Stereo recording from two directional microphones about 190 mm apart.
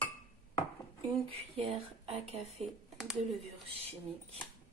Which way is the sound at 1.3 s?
30° right (ahead or behind).